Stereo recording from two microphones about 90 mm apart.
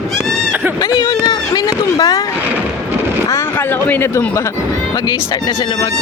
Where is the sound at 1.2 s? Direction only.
45° left (ahead or behind).